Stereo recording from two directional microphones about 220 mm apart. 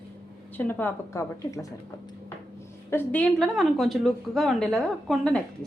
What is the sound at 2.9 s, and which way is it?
A woman's voice, 5° left (ahead or behind).